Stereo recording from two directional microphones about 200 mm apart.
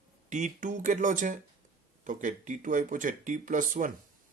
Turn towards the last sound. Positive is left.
turn(degrees=-40)  # may be behind; listen again after turning